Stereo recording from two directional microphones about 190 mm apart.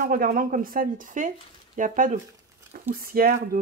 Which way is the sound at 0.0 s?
50° right (ahead or behind).